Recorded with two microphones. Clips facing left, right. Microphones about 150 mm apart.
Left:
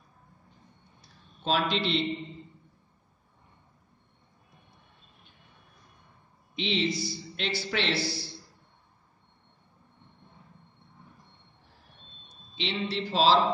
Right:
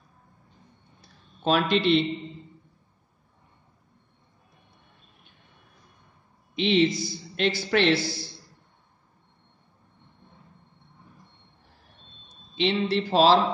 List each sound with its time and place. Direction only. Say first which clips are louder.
1.4 s a man's voice: right 5 dB; 55° right (ahead or behind)
6.5 s a man's voice: right 7 dB; 55° right (ahead or behind)
12.5 s a man's voice: right 8 dB; 50° right (ahead or behind)